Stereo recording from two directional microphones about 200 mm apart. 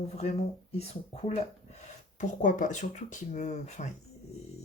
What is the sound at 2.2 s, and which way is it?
Speech, 40° left (ahead or behind).